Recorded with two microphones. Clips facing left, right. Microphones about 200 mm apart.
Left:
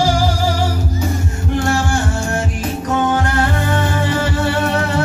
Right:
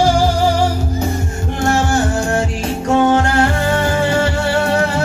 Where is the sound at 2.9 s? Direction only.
25° right (ahead or behind).